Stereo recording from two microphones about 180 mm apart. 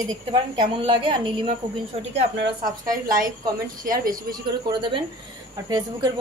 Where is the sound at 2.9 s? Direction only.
50° right (ahead or behind).